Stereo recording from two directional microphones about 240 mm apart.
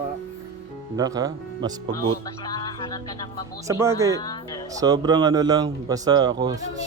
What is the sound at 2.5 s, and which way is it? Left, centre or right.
Music, centre.